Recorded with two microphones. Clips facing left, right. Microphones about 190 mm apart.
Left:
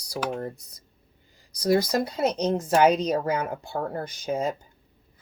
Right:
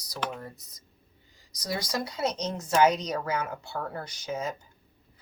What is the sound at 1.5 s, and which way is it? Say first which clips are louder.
A woman's voice: left 10 dB; 55° left (ahead or behind).